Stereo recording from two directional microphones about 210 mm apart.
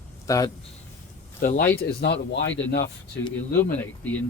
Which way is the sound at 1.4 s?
40° left (ahead or behind).